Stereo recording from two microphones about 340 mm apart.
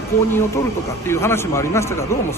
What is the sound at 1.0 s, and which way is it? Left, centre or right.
A man's voice, centre.